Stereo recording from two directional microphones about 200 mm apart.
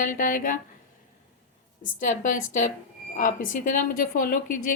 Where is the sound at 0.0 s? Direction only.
40° left (ahead or behind).